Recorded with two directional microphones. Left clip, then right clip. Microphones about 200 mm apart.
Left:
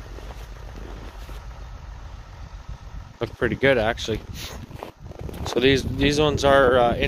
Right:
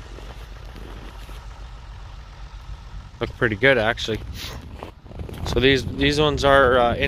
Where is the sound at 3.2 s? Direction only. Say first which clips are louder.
Right 2 dB; 10° left (ahead or behind).